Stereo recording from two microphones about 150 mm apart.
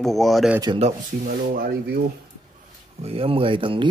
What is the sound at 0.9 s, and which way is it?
Speech, 70° right (ahead or behind).